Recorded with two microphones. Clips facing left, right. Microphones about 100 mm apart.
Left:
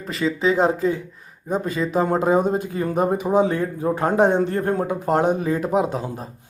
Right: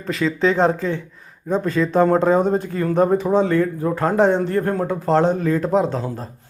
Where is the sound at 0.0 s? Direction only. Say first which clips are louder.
Right 2 dB; centre (ahead or behind).